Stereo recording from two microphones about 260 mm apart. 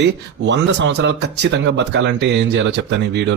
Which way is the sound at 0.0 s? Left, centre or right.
Right.